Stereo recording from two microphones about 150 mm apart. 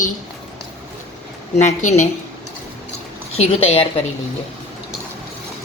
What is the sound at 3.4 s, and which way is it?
Speech, 40° left (ahead or behind).